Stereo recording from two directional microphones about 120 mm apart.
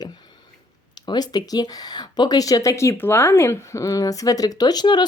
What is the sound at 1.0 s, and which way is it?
Speech, 35° left (ahead or behind).